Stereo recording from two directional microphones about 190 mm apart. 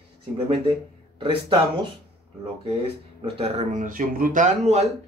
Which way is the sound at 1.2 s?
25° right (ahead or behind).